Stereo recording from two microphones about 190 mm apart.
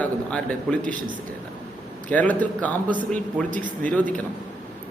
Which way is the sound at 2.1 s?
10° left (ahead or behind).